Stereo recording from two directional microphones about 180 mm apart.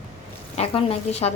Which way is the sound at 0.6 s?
35° left (ahead or behind).